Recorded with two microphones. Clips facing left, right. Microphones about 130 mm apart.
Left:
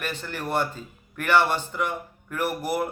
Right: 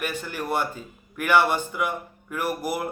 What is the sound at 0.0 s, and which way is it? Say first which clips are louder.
Speech: right 2 dB; 10° right (ahead or behind).